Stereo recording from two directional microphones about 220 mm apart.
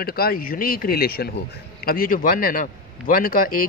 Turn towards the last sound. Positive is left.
turn(degrees=40)  # may be behind; listen again after turning